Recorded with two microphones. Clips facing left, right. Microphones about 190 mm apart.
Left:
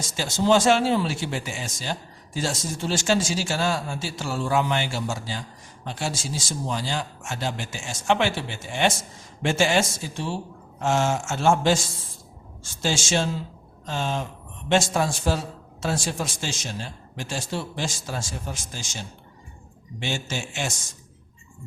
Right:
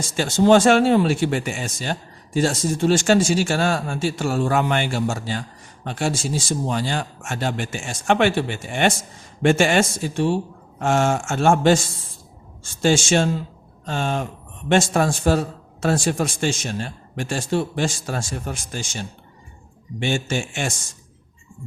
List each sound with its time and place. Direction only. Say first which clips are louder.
0.2 s speech: right 6 dB; 55° right (ahead or behind)